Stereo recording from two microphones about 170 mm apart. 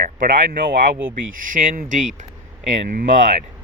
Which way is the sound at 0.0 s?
55° right (ahead or behind).